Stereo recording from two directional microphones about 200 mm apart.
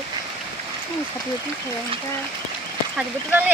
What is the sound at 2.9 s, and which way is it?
Speech, 10° right (ahead or behind).